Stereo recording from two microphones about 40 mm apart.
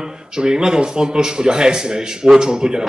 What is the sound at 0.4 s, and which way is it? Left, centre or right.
Speech, centre.